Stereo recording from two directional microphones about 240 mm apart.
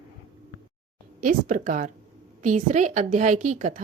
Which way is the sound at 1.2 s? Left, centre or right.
Right.